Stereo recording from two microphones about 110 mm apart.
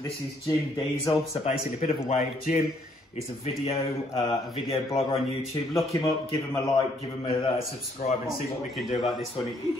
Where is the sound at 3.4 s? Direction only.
60° left (ahead or behind).